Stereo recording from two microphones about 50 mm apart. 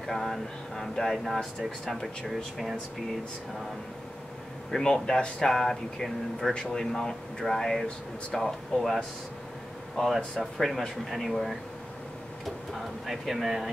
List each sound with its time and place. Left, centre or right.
0.0 s speech: centre
4.7 s speech: centre
6.5 s speech: centre
12.7 s speech: centre